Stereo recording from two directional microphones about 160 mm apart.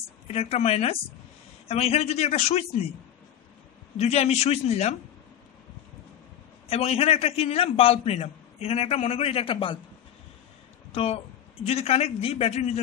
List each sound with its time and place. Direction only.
0.3 s a man's voice: 40° left (ahead or behind)
4.0 s a man's voice: 40° left (ahead or behind)
6.7 s a man's voice: 40° left (ahead or behind)
10.9 s a man's voice: 35° left (ahead or behind)